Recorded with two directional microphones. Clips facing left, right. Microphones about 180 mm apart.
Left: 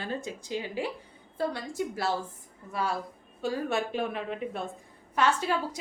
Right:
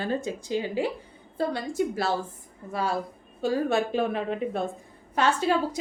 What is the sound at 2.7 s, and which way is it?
A woman's voice, 30° right (ahead or behind).